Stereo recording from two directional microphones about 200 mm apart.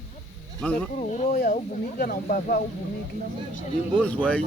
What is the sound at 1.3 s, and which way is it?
Speech, 50° left (ahead or behind).